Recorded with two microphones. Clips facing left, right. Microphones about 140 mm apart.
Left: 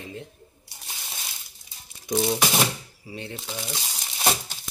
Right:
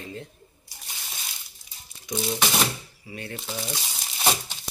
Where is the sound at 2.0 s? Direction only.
60° left (ahead or behind).